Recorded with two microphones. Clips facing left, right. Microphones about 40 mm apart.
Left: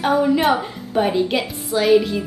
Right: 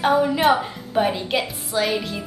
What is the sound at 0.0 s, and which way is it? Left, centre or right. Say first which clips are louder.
A woman's voice: left 1 dB; centre.